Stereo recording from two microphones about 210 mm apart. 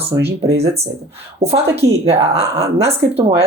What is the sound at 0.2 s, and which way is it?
Speech, 55° right (ahead or behind).